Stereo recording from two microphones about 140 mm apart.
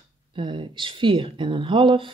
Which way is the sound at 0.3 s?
35° right (ahead or behind).